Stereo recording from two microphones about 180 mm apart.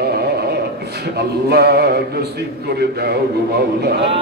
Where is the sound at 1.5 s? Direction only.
65° right (ahead or behind).